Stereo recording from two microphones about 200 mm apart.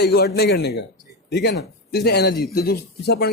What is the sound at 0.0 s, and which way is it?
A man's voice, 55° left (ahead or behind).